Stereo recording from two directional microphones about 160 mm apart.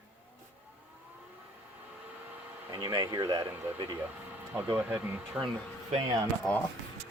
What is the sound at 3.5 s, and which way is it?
Speech, 10° right (ahead or behind).